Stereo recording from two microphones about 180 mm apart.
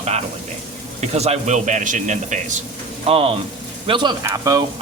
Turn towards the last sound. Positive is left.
turn(degrees=-20)  # may be behind; listen again after turning